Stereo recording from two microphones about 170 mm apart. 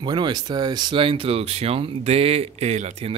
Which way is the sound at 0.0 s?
25° right (ahead or behind).